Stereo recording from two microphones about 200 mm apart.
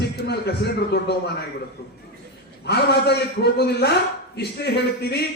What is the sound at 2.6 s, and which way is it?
A man's voice, 55° left (ahead or behind).